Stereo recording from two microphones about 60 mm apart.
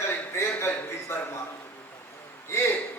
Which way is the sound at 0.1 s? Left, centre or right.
Left.